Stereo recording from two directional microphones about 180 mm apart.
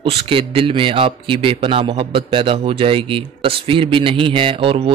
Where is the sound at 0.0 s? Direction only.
30° right (ahead or behind).